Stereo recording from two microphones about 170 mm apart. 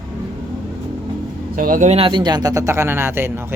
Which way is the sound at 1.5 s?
55° right (ahead or behind).